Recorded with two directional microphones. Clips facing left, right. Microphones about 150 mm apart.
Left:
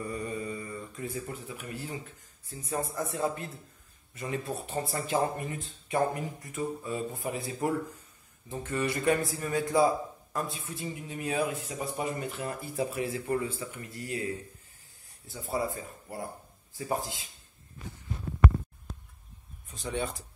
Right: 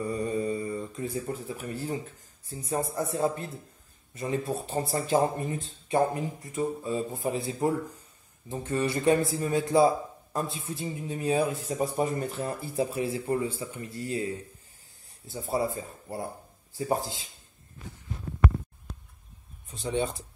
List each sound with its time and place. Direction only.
0.0 s mantra: 30° right (ahead or behind)
2.5 s a man's voice: 30° right (ahead or behind)
15.2 s speech: 30° right (ahead or behind)
19.7 s speech: 25° right (ahead or behind)